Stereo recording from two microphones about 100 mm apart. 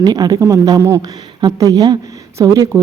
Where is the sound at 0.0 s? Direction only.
45° right (ahead or behind).